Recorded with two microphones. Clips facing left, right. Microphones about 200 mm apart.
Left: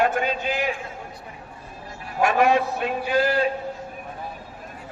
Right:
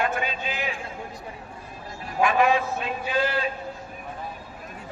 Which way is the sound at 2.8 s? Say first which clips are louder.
Left 4 dB; 45° left (ahead or behind).